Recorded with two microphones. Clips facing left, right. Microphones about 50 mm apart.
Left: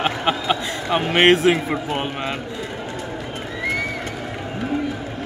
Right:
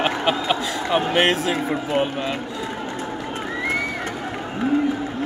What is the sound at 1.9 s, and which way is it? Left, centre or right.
Speech, centre.